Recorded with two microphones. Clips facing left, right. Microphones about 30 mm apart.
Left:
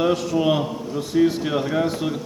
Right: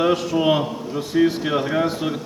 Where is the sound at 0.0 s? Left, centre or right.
Centre.